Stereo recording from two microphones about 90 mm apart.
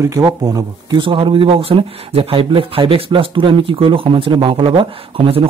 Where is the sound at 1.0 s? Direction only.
75° right (ahead or behind).